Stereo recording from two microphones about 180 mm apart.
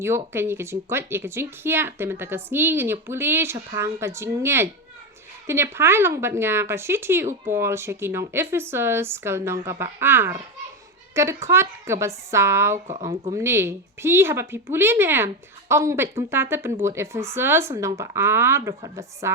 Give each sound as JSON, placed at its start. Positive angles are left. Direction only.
{"t": 0.0, "sound": "speech", "side_deg": -15}